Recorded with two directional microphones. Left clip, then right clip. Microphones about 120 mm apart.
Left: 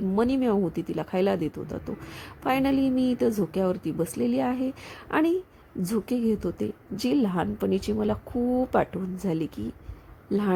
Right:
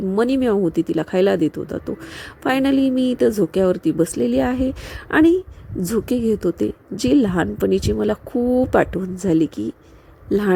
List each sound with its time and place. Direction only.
0.2 s speech: 40° right (ahead or behind)